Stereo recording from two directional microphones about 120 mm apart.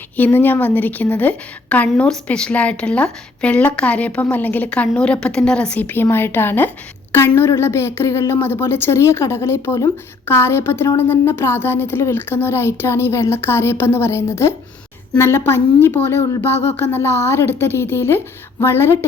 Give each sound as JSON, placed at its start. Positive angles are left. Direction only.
{"t": 0.3, "sound": "a woman's voice", "side_deg": 15}